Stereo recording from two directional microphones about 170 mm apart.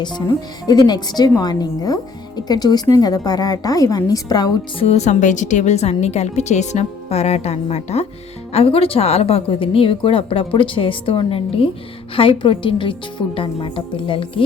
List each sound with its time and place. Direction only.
0.0 s speech: 25° left (ahead or behind)
4.9 s a woman's voice: 45° left (ahead or behind)